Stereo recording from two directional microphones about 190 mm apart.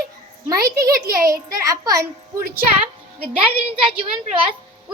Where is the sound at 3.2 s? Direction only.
5° right (ahead or behind).